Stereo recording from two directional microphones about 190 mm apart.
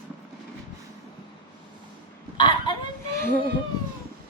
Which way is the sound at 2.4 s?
25° left (ahead or behind).